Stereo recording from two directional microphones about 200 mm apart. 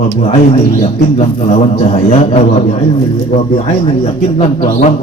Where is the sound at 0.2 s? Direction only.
35° left (ahead or behind).